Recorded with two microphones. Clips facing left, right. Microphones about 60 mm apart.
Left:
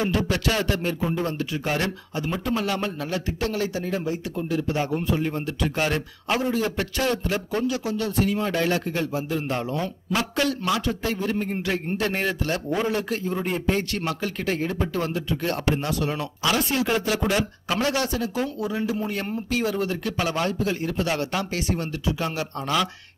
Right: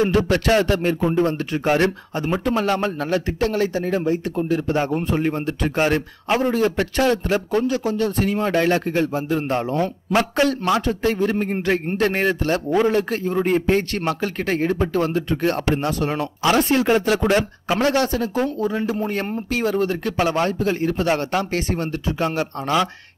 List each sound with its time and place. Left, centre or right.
0.0 s a man's voice: right
6.4 s a man's voice: right
22.7 s speech: right